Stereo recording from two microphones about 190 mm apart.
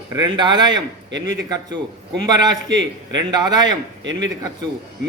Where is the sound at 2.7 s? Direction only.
75° right (ahead or behind).